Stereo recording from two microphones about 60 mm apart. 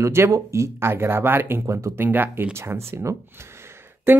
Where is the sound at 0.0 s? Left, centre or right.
Right.